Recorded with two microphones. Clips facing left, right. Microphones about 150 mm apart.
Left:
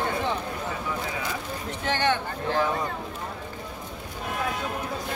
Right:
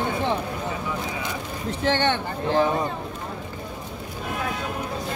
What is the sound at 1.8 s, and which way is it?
Speech, 30° right (ahead or behind).